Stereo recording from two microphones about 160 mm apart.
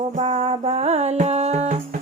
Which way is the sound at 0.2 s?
40° right (ahead or behind).